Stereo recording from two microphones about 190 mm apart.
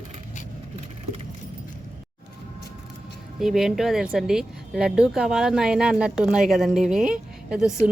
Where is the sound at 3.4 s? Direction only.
Centre (ahead or behind).